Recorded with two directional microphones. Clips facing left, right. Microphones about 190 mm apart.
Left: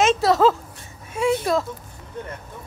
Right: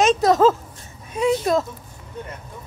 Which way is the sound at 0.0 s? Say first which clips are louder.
Right 2 dB; 20° right (ahead or behind).